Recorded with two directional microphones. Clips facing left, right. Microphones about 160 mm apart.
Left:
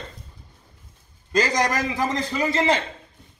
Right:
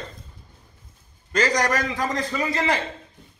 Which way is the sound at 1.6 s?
20° left (ahead or behind).